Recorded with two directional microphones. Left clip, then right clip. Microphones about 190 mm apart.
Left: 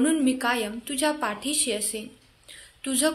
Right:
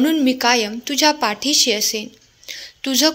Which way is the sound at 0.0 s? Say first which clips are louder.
Right 7 dB; 30° right (ahead or behind).